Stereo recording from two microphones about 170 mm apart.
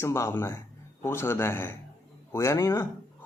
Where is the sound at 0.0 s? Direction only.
15° left (ahead or behind).